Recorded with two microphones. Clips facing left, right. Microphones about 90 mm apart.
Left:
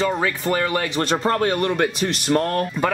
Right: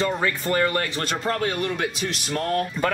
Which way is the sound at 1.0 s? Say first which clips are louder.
Left 5 dB; 35° left (ahead or behind).